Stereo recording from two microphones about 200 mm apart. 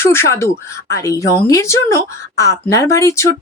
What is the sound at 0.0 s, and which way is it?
A woman's voice, 10° left (ahead or behind).